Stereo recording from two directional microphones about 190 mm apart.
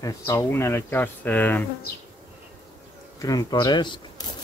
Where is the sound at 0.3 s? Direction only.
15° left (ahead or behind).